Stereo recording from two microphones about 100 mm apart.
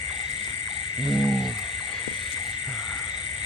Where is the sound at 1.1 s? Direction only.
Centre (ahead or behind).